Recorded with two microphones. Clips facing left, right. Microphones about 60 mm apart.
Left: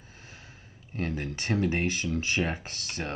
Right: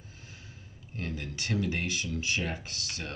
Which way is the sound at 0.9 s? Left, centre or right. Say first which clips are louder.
Left 5 dB; left.